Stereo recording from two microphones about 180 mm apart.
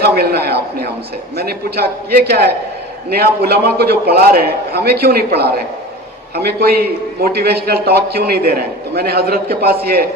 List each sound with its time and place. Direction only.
0.0 s a man's voice: 60° right (ahead or behind)